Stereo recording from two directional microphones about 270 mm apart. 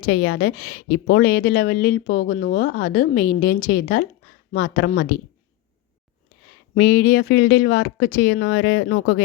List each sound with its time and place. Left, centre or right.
0.0 s a woman's voice: left
6.7 s a woman's voice: left